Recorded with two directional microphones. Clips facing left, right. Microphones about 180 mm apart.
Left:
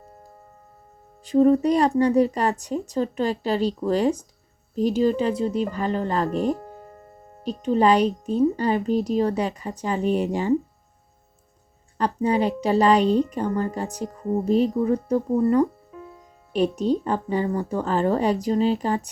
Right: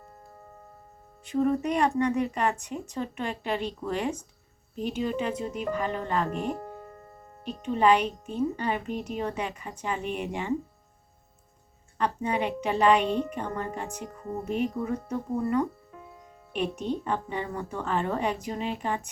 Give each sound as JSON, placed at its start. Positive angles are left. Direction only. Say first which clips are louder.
{"t": 1.2, "sound": "speech", "louder": "left 8 dB", "side_deg": 35}
{"t": 11.9, "sound": "speech", "louder": "left 6 dB", "side_deg": 35}